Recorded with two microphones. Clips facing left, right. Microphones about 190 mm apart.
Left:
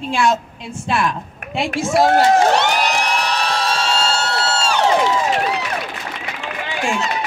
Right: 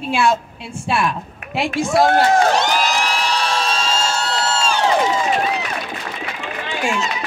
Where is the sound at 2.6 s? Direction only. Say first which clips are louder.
Even; 65° left (ahead or behind).